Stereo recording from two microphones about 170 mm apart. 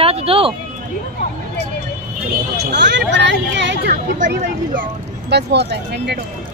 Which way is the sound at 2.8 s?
90° right.